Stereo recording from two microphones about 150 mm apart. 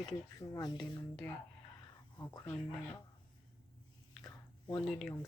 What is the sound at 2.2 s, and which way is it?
Speech, 25° left (ahead or behind).